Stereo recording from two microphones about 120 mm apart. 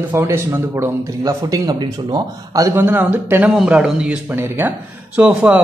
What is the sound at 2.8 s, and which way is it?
A man's voice, 15° right (ahead or behind).